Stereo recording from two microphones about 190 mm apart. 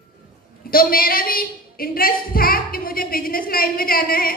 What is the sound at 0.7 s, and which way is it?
A woman's voice, 50° left (ahead or behind).